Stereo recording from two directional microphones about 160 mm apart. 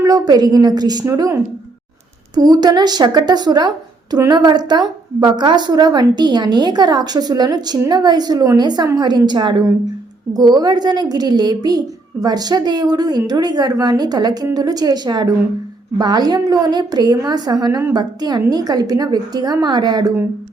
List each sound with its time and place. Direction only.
0.0 s a woman's voice: 25° right (ahead or behind)